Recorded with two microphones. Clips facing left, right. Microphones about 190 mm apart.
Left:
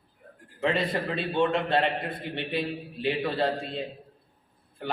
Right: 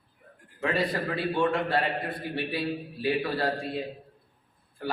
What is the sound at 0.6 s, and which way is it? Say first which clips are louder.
A man's voice: left 1 dB; 25° left (ahead or behind).